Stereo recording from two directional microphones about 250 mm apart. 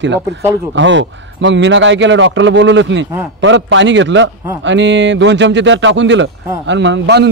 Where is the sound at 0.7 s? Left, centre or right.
Right.